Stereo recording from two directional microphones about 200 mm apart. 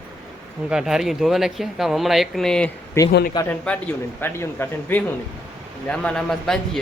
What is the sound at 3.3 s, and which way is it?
Speech, 10° left (ahead or behind).